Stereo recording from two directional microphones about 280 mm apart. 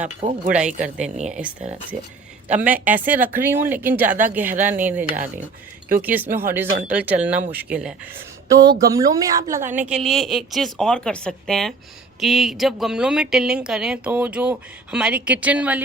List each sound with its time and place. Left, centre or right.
0.2 s speech: right
1.4 s a woman's voice: centre
4.0 s speech: right
4.4 s a woman's voice: centre